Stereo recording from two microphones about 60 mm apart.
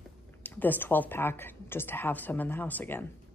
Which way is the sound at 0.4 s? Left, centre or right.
Left.